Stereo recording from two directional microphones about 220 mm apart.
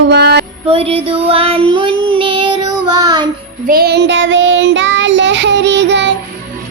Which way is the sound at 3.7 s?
45° right (ahead or behind).